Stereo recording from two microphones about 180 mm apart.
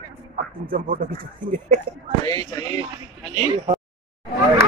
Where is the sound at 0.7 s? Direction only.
55° right (ahead or behind).